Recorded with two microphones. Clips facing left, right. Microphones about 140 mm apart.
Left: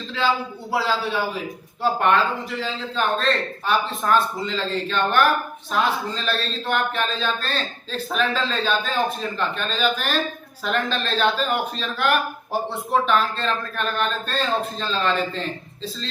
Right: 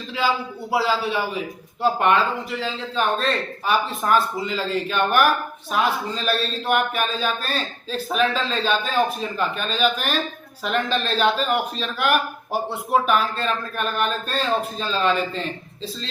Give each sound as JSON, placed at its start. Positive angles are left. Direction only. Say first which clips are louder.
{"t": 0.7, "sound": "a man's voice", "louder": "right 2 dB", "side_deg": -5}